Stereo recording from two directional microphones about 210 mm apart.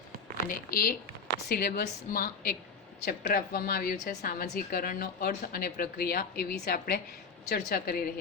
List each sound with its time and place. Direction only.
0.4 s speech: 45° left (ahead or behind)